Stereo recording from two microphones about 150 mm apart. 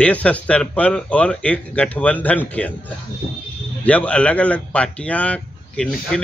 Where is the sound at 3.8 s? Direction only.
10° left (ahead or behind).